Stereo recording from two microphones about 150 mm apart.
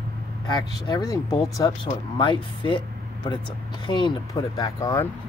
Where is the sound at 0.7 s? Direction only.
25° left (ahead or behind).